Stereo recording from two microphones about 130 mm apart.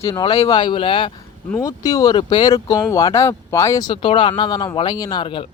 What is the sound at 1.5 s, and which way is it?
Speech, 30° left (ahead or behind).